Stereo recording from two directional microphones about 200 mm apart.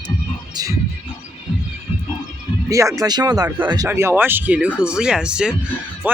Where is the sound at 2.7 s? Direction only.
15° right (ahead or behind).